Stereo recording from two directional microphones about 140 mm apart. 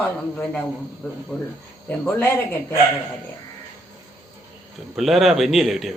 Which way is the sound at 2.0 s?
20° left (ahead or behind).